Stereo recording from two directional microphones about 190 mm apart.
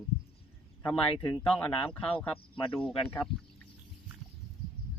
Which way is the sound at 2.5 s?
25° left (ahead or behind).